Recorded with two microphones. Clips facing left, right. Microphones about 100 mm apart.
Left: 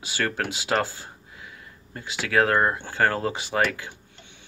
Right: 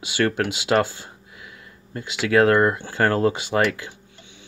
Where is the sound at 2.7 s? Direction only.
25° left (ahead or behind).